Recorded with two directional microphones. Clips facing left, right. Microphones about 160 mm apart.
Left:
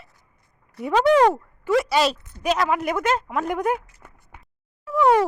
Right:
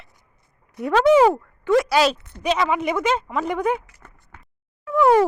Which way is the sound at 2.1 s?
65° right (ahead or behind).